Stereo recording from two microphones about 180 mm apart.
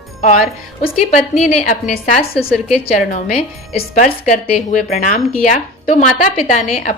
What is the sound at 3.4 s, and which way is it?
A woman's voice, 35° left (ahead or behind).